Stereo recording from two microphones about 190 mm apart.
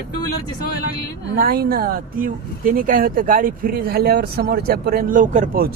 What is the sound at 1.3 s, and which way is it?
Speech, 50° right (ahead or behind).